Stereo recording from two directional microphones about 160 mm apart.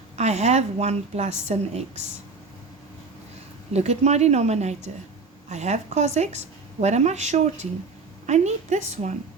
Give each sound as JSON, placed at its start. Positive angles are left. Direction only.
{"t": 0.2, "sound": "a woman's voice", "side_deg": -45}
{"t": 3.7, "sound": "a woman's voice", "side_deg": -45}